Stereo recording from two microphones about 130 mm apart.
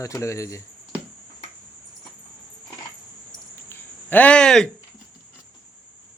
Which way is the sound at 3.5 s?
15° left (ahead or behind).